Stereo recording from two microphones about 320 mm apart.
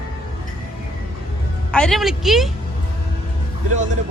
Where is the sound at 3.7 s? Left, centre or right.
Right.